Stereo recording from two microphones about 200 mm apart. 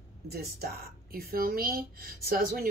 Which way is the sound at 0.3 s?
50° right (ahead or behind).